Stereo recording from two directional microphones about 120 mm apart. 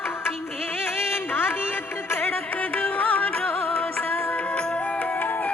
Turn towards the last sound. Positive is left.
turn(degrees=15)  # may be behind; listen again after turning